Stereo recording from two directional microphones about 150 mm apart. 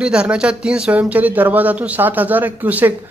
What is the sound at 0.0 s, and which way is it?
A man's voice, 5° right (ahead or behind).